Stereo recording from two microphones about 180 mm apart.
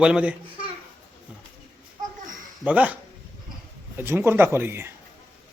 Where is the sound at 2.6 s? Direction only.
10° right (ahead or behind).